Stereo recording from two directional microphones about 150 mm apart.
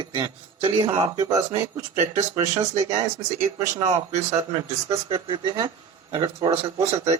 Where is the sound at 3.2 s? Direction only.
40° right (ahead or behind).